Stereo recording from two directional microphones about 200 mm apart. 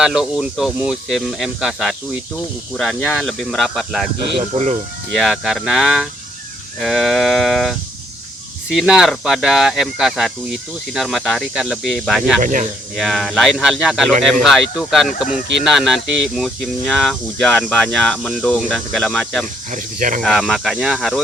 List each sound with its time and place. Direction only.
0.0 s speech: 5° right (ahead or behind)
4.4 s speech: 35° right (ahead or behind)
5.1 s speech: centre (ahead or behind)
8.8 s speech: centre (ahead or behind)
12.4 s speech: 40° right (ahead or behind)
13.0 s speech: centre (ahead or behind)
19.7 s speech: 40° right (ahead or behind)
20.2 s speech: centre (ahead or behind)